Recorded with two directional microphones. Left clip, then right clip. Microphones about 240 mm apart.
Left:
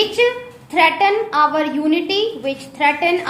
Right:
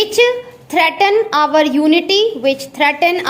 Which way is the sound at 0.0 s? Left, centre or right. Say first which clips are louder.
Right 4 dB; right.